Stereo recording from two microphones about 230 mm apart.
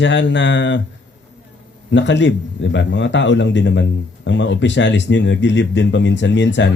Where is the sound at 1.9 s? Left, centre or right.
Left.